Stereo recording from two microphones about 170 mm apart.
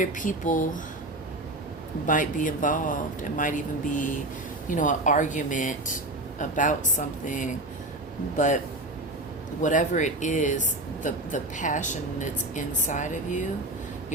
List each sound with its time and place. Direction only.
0.0 s speech: 50° left (ahead or behind)
2.0 s speech: 50° left (ahead or behind)